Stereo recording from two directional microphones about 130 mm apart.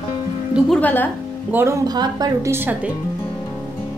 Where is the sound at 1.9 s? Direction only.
30° right (ahead or behind).